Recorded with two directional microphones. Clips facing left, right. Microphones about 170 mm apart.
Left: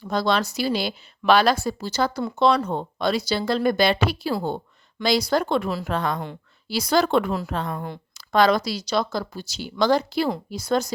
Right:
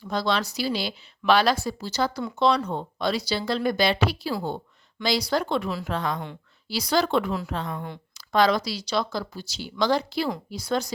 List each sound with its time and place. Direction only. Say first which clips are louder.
0.1 s a woman's voice: left 3 dB; 50° left (ahead or behind)